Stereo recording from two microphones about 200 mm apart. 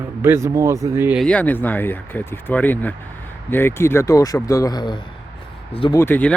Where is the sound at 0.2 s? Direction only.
15° right (ahead or behind).